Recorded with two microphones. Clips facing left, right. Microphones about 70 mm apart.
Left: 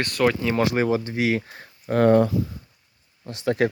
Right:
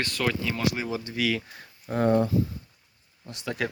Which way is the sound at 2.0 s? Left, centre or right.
Left.